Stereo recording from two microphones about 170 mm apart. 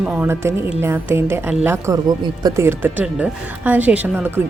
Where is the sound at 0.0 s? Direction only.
10° right (ahead or behind).